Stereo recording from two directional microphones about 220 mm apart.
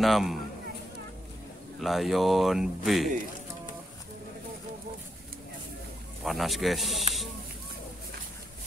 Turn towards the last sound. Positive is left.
turn(degrees=0)  # may be behind; listen again after turning